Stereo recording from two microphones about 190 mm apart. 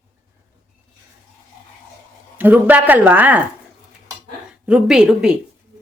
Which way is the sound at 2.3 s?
10° right (ahead or behind).